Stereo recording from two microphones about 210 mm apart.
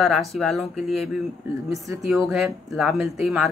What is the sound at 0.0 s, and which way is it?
Speech, centre (ahead or behind).